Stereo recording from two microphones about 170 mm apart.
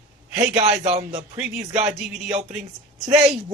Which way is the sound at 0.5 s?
40° right (ahead or behind).